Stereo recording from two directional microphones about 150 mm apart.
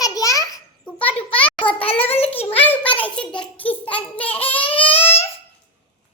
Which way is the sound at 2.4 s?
15° left (ahead or behind).